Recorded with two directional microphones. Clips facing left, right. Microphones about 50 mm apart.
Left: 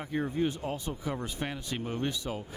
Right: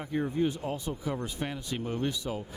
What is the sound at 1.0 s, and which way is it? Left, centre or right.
Speech, left.